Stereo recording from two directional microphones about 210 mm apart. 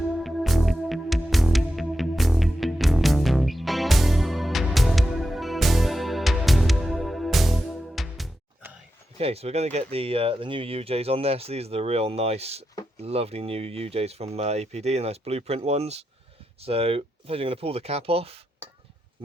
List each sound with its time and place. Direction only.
0.0 s music: centre (ahead or behind)
9.1 s speech: 30° right (ahead or behind)